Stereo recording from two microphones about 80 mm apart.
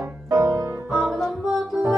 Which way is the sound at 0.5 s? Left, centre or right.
Right.